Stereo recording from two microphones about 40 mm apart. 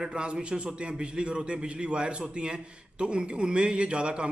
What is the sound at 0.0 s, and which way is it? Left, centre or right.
A man's voice, right.